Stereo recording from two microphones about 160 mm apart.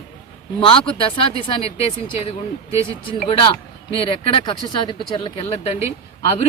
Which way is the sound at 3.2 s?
35° left (ahead or behind).